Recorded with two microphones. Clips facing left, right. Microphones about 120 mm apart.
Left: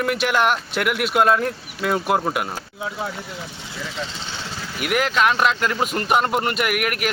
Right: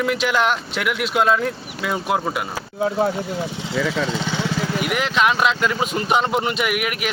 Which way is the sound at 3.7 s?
70° right (ahead or behind).